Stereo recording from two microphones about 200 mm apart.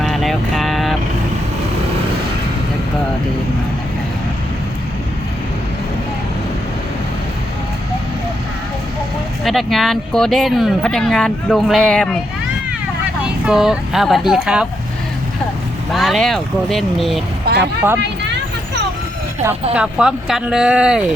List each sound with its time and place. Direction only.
0.0 s vehicle: centre (ahead or behind)
9.4 s speech: centre (ahead or behind)
13.4 s speech: 5° right (ahead or behind)
15.9 s speech: centre (ahead or behind)
17.4 s vehicle: 55° right (ahead or behind)
19.7 s speech: 5° right (ahead or behind)